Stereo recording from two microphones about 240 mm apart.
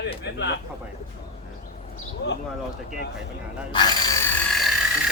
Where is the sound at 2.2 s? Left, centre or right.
Left.